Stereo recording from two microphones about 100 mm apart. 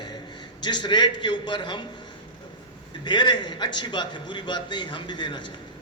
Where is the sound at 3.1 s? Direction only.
50° left (ahead or behind).